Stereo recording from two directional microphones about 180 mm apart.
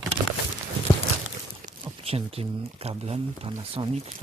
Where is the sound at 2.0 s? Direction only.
35° right (ahead or behind).